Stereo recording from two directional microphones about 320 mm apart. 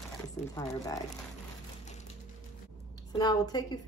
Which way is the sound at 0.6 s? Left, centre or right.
Centre.